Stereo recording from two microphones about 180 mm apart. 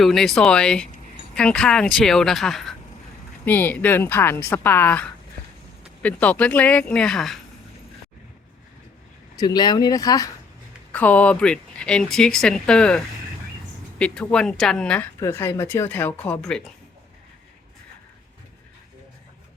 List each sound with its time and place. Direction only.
0.0 s speech: centre (ahead or behind)
9.3 s speech: 20° left (ahead or behind)
10.9 s speech: 10° left (ahead or behind)
14.0 s speech: 5° left (ahead or behind)